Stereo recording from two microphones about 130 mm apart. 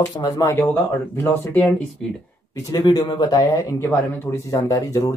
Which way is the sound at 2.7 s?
30° left (ahead or behind).